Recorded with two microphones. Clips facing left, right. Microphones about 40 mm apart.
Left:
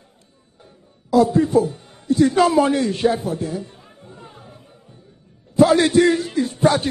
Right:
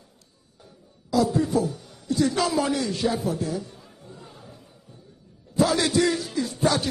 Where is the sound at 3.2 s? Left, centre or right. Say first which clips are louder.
Left 2 dB; left.